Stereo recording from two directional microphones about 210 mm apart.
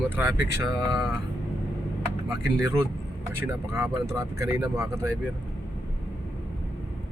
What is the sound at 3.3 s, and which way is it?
Speech, 10° right (ahead or behind).